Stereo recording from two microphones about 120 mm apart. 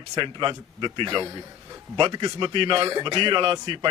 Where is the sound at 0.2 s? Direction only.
40° right (ahead or behind).